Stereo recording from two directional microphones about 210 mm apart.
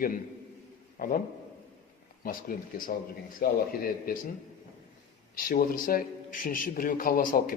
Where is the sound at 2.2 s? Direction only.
40° left (ahead or behind).